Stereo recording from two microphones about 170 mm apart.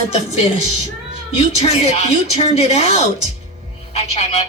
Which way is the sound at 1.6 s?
40° left (ahead or behind).